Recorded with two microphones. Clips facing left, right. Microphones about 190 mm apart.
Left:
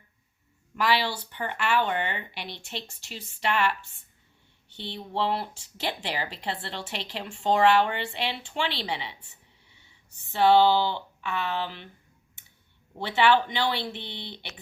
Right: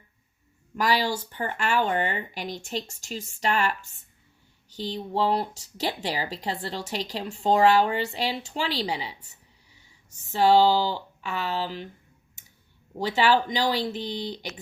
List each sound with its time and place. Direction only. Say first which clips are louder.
0.8 s speech: right 1 dB; 40° right (ahead or behind)
10.3 s speech: right 1 dB; 40° right (ahead or behind)
13.0 s speech: even; 40° right (ahead or behind)